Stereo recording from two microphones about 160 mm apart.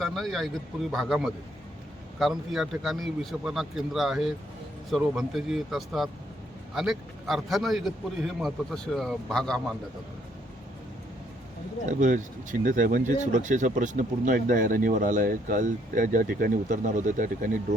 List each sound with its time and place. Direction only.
0.0 s a man's voice: centre (ahead or behind)
11.9 s speech: 50° right (ahead or behind)